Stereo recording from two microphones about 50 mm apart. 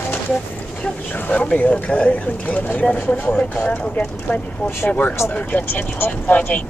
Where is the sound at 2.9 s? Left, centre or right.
Left.